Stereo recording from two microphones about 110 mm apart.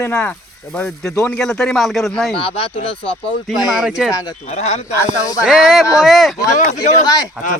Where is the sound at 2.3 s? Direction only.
55° left (ahead or behind).